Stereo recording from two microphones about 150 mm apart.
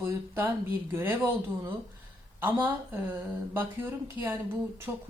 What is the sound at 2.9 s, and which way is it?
A woman's voice, 10° right (ahead or behind).